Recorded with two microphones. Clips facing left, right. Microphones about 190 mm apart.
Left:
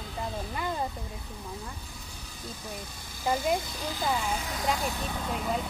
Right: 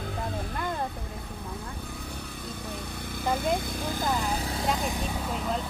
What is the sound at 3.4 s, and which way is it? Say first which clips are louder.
Speech: right 1 dB; 55° right (ahead or behind).